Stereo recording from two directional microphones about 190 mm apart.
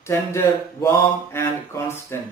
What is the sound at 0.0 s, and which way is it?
Speech, 15° left (ahead or behind).